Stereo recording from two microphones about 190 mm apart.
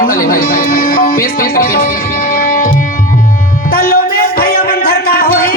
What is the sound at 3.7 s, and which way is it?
Music, 50° left (ahead or behind).